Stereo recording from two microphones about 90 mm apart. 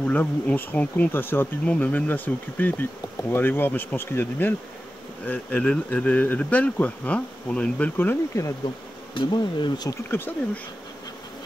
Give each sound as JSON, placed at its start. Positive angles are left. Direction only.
{"t": 0.0, "sound": "bee", "side_deg": 20}
{"t": 5.2, "sound": "speech", "side_deg": 20}
{"t": 8.6, "sound": "bee", "side_deg": 60}
{"t": 10.1, "sound": "bee", "side_deg": 25}